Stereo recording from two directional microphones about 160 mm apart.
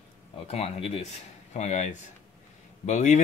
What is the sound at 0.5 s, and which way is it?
Speech, 40° left (ahead or behind).